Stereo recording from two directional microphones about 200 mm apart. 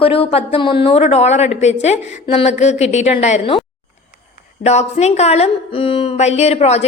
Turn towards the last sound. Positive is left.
turn(degrees=30)  # may be behind; listen again after turning